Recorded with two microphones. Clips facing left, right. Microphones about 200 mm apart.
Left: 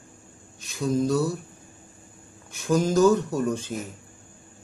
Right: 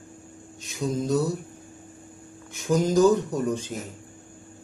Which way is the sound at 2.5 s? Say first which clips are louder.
Even; 20° right (ahead or behind).